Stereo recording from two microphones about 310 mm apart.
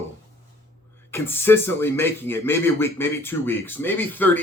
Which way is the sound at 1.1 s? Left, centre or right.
Centre.